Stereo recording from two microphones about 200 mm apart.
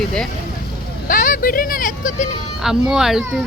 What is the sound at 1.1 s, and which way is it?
Speech, 40° left (ahead or behind).